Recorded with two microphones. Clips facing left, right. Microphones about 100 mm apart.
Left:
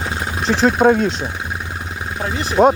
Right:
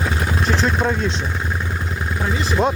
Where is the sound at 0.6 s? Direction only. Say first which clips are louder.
Left 7 dB; 45° left (ahead or behind).